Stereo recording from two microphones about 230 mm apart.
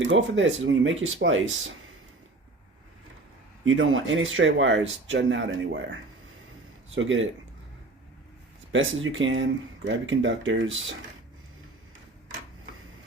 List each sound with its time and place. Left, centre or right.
0.1 s speech: right
3.6 s speech: right
8.7 s speech: right